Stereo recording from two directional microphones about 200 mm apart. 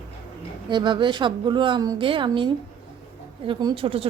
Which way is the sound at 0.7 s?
25° right (ahead or behind).